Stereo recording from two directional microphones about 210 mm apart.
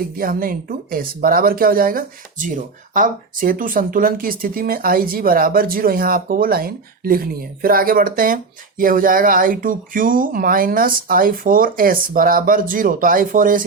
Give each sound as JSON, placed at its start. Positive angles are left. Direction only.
{"t": 0.2, "sound": "speech", "side_deg": -45}